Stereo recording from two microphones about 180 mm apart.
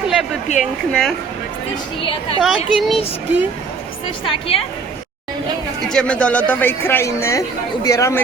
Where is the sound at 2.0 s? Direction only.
30° left (ahead or behind).